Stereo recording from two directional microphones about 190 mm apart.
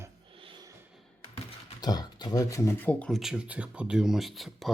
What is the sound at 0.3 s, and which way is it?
Snort, 25° right (ahead or behind).